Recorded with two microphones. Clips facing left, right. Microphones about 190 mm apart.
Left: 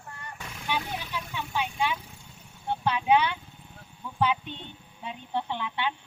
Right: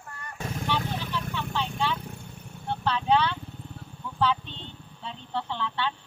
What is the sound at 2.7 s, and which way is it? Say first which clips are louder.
Clip-clop: left 1 dB; 15° left (ahead or behind).